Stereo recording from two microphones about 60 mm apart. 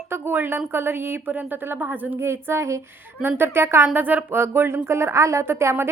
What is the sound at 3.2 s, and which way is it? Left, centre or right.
Speech, right.